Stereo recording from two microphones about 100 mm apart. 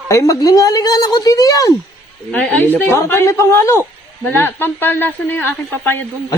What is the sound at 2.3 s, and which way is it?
Speech, 15° left (ahead or behind).